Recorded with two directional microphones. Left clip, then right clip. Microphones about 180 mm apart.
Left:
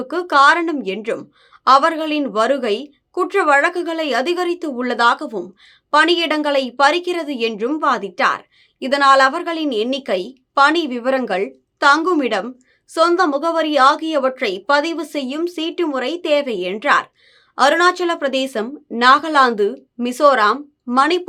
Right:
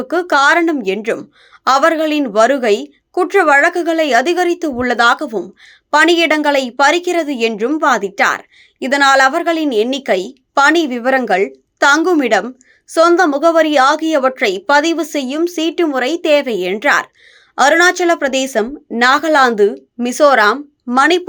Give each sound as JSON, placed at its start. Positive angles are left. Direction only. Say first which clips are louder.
{"t": 0.0, "sound": "a woman's voice", "louder": "right 1 dB", "side_deg": -25}